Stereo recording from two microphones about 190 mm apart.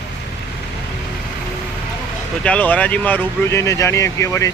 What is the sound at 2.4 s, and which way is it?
Speech, 5° left (ahead or behind).